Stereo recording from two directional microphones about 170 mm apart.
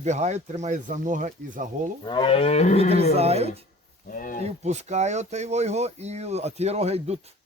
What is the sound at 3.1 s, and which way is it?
Speech, 40° right (ahead or behind).